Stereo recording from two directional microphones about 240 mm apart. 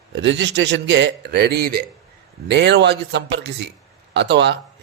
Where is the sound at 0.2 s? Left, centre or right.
Right.